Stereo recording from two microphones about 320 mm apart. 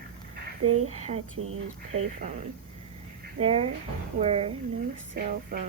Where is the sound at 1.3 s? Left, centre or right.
Right.